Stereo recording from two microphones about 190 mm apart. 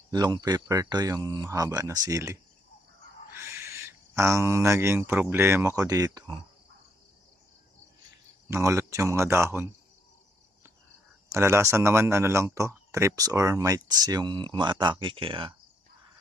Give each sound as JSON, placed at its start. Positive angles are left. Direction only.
{"t": 0.1, "sound": "speech", "side_deg": -20}
{"t": 8.4, "sound": "speech", "side_deg": -15}
{"t": 11.3, "sound": "speech", "side_deg": -15}